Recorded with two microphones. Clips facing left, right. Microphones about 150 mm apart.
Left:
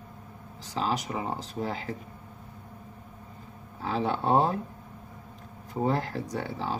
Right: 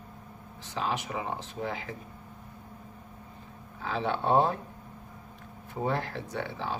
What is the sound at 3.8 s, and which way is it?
Speech, 40° left (ahead or behind).